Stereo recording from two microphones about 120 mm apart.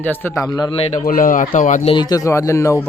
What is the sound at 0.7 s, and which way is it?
Speech, 55° left (ahead or behind).